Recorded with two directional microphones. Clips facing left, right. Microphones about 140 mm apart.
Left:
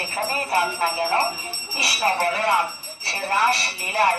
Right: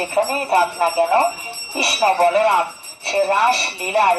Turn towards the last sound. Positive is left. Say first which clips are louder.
# right 5 dB
turn(degrees=-25)  # may be behind; listen again after turning